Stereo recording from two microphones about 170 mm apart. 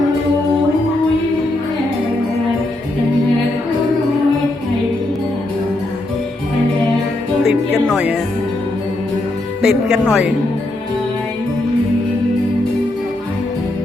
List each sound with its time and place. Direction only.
7.4 s music: centre (ahead or behind)
9.6 s speech: centre (ahead or behind)